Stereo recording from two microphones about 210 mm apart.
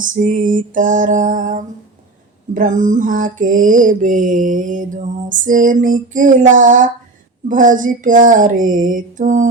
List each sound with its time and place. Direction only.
0.0 s mantra: 40° right (ahead or behind)